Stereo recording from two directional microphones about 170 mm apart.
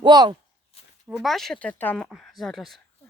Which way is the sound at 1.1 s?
Centre (ahead or behind).